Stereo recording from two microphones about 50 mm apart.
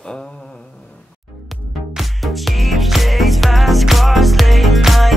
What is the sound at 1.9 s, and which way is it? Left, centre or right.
Music, centre.